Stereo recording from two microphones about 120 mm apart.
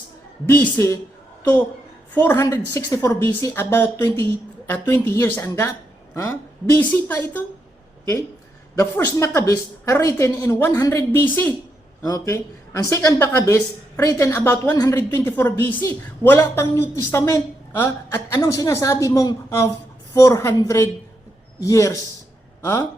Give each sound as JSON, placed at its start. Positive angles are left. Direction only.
{"t": 0.4, "sound": "a woman's voice", "side_deg": 20}
{"t": 2.1, "sound": "a woman's voice", "side_deg": 20}
{"t": 8.8, "sound": "a woman's voice", "side_deg": 25}
{"t": 14.9, "sound": "a woman's voice", "side_deg": 20}